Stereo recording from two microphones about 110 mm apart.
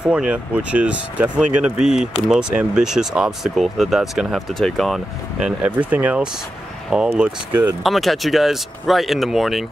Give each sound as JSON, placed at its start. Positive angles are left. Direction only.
{"t": 0.0, "sound": "speech", "side_deg": -10}